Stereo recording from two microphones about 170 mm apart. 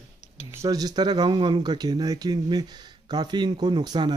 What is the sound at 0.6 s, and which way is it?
Speech, 20° right (ahead or behind).